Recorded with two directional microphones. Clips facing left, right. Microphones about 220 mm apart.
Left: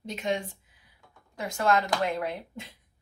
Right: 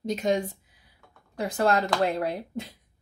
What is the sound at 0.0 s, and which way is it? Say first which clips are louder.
Speech: right 5 dB; 40° right (ahead or behind).